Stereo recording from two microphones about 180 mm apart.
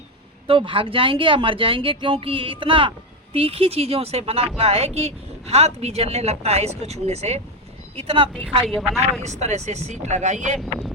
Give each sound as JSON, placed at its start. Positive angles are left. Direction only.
{"t": 0.4, "sound": "a woman's voice", "side_deg": -30}
{"t": 8.6, "sound": "a woman's voice", "side_deg": 0}
{"t": 9.2, "sound": "a woman's voice", "side_deg": -40}